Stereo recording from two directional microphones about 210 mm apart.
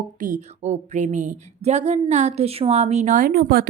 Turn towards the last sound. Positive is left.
turn(degrees=-45)  # may be behind; listen again after turning